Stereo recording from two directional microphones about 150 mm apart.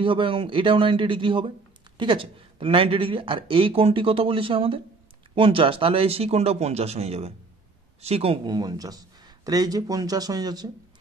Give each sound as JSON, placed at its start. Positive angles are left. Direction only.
{"t": 0.0, "sound": "speech", "side_deg": -35}